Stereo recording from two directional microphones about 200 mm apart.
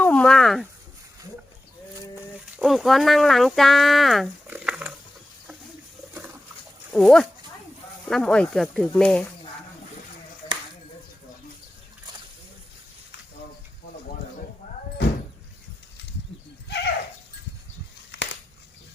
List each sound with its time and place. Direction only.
0.0 s speech: 5° left (ahead or behind)
2.6 s speech: centre (ahead or behind)
6.9 s speech: 5° left (ahead or behind)
16.6 s horse: 55° left (ahead or behind)